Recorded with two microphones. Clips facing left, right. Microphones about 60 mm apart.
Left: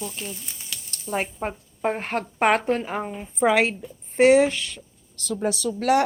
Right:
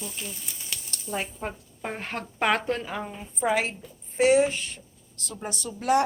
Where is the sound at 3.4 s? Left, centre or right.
Left.